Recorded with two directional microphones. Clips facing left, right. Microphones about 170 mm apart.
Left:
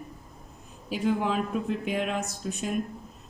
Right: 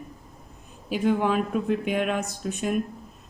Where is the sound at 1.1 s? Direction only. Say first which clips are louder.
Right 3 dB; 60° right (ahead or behind).